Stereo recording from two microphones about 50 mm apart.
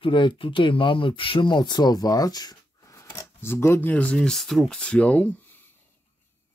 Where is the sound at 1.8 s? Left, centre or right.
Left.